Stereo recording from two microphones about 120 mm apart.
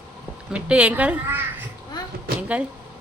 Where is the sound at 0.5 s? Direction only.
10° right (ahead or behind).